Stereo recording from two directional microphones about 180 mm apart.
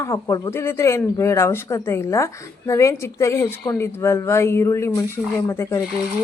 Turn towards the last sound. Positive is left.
turn(degrees=15)  # may be behind; listen again after turning